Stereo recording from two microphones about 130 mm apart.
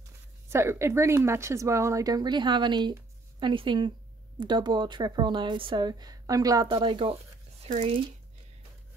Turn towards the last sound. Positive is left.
turn(degrees=-60)  # may be behind; listen again after turning